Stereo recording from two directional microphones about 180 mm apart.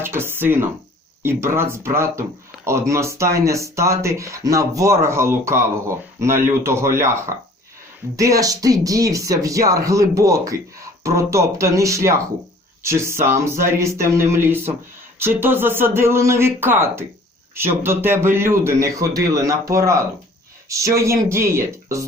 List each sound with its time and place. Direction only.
0.0 s speech: 15° right (ahead or behind)